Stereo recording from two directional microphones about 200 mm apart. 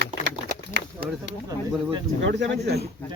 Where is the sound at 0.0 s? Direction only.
60° right (ahead or behind).